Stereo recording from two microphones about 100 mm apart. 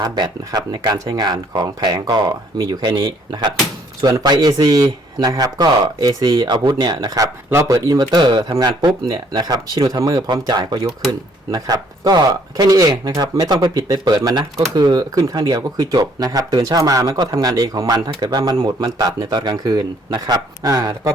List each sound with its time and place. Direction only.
0.0 s speech: 40° right (ahead or behind)
7.9 s speech: 50° right (ahead or behind)